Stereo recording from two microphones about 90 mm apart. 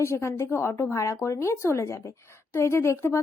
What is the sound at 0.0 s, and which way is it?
Speech, 30° left (ahead or behind).